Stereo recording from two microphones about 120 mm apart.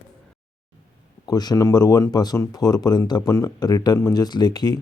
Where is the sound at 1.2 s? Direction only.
35° left (ahead or behind).